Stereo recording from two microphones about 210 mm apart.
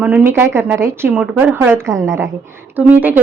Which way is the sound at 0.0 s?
10° right (ahead or behind).